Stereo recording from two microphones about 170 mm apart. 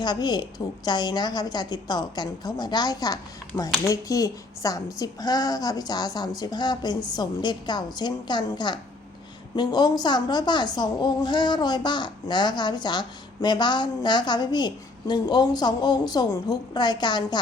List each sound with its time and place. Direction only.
0.0 s a woman's voice: 25° left (ahead or behind)